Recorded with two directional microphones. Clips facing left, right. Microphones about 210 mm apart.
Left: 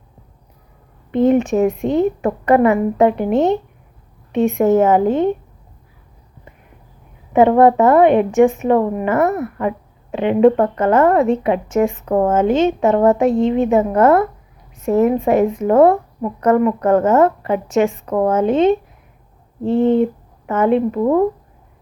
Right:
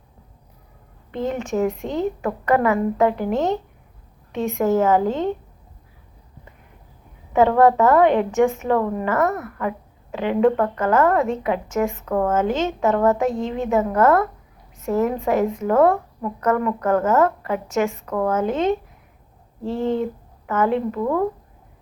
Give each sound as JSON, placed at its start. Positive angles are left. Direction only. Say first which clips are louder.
{"t": 1.1, "sound": "a woman's voice", "louder": "left 10 dB", "side_deg": 20}
{"t": 7.3, "sound": "a woman's voice", "louder": "left 4 dB", "side_deg": 20}